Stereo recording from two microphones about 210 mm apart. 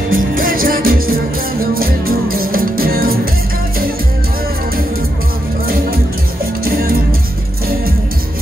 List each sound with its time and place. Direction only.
0.1 s music: 40° right (ahead or behind)
6.6 s music: 45° right (ahead or behind)